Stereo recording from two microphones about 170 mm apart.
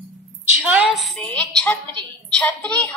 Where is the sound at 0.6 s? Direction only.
5° right (ahead or behind).